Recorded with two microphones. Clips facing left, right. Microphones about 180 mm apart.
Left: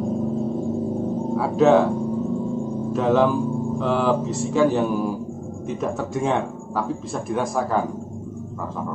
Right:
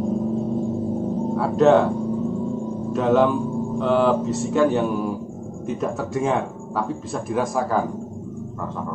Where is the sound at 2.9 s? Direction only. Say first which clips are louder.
Right 1 dB; centre (ahead or behind).